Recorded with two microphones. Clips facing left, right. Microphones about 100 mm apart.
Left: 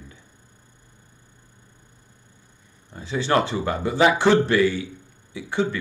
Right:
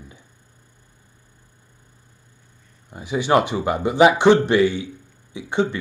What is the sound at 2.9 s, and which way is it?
Speech, 15° right (ahead or behind).